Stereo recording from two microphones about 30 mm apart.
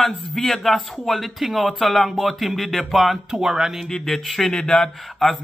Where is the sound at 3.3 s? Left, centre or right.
Centre.